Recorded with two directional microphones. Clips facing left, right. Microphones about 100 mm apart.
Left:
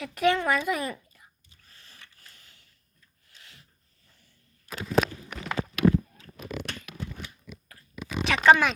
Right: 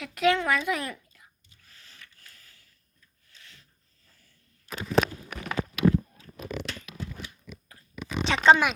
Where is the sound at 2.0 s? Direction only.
20° left (ahead or behind).